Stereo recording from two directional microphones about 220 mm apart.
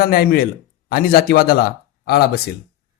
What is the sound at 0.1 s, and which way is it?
Speech, 45° left (ahead or behind).